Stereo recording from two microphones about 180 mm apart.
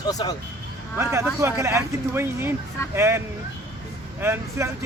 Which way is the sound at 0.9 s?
10° right (ahead or behind).